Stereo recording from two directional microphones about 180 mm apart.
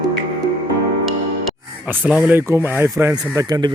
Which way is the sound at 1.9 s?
10° right (ahead or behind).